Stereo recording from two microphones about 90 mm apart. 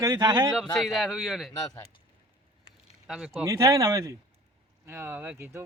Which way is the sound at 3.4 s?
35° right (ahead or behind).